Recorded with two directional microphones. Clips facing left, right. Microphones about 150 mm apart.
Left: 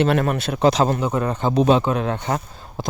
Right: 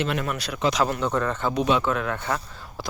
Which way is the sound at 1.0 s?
15° left (ahead or behind).